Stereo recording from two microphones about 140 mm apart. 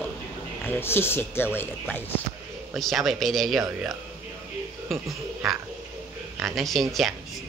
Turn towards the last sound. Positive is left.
turn(degrees=0)  # may be behind; listen again after turning